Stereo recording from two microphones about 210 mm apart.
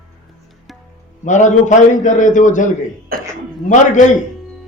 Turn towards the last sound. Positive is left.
turn(degrees=35)  # may be behind; listen again after turning